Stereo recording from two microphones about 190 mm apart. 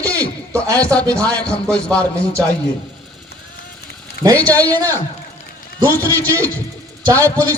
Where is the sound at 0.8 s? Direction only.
5° left (ahead or behind).